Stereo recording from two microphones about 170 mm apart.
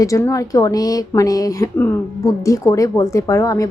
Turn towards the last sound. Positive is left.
turn(degrees=20)  # may be behind; listen again after turning